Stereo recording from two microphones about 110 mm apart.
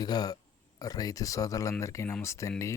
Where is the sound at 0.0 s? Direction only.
35° left (ahead or behind).